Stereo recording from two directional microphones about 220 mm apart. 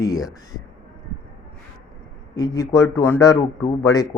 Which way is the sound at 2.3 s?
15° left (ahead or behind).